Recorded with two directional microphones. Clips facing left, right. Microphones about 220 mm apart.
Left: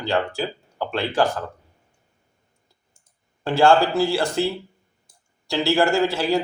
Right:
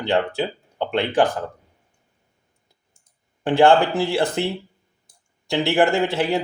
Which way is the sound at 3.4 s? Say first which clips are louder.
Right 2 dB; 15° right (ahead or behind).